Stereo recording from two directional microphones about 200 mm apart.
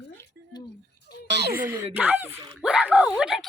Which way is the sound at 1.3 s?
55° right (ahead or behind).